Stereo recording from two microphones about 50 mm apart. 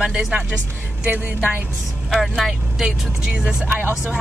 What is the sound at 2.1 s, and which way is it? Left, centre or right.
Speech, centre.